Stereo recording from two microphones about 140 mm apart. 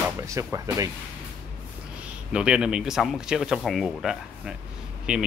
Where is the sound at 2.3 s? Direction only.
5° right (ahead or behind).